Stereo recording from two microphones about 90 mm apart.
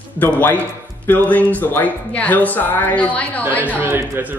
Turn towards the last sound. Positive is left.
turn(degrees=-20)  # may be behind; listen again after turning